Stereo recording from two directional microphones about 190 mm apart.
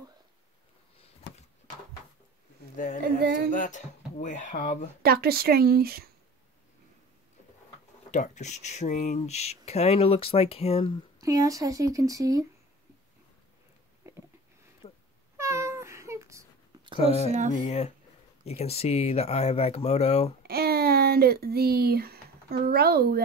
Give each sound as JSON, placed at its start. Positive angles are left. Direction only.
{"t": 2.7, "sound": "speech", "side_deg": 40}
{"t": 3.2, "sound": "speech", "side_deg": -55}
{"t": 3.5, "sound": "speech", "side_deg": 40}
{"t": 5.0, "sound": "a woman's voice", "side_deg": -55}
{"t": 8.1, "sound": "speech", "side_deg": 40}
{"t": 11.1, "sound": "speech", "side_deg": -20}
{"t": 14.0, "sound": "a sound", "side_deg": -15}
{"t": 14.8, "sound": "a sound", "side_deg": 35}
{"t": 15.3, "sound": "cat", "side_deg": -15}
{"t": 17.3, "sound": "speech", "side_deg": -40}
{"t": 17.6, "sound": "speech", "side_deg": 35}
{"t": 20.4, "sound": "speech", "side_deg": -55}